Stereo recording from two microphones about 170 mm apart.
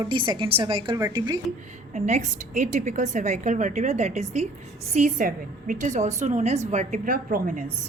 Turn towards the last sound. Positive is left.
turn(degrees=-50)  # may be behind; listen again after turning